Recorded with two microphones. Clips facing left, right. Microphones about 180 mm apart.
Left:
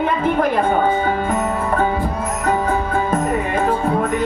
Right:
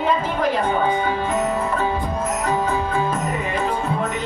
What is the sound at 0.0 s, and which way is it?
Music, 55° left (ahead or behind).